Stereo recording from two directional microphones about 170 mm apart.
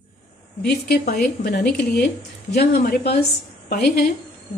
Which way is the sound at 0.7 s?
65° left (ahead or behind).